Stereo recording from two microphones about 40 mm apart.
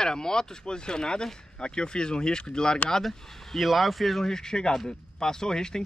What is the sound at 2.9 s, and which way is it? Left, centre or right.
Speech, centre.